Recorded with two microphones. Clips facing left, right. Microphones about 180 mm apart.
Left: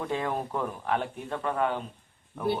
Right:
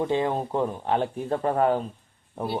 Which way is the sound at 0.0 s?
25° right (ahead or behind).